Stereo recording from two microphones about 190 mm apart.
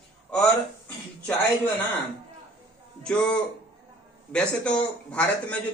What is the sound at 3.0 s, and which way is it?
A man's voice, 5° left (ahead or behind).